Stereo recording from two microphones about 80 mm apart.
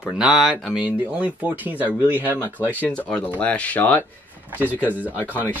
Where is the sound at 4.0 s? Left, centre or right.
Right.